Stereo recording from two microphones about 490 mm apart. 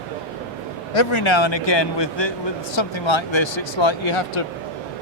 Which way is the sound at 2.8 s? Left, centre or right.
Left.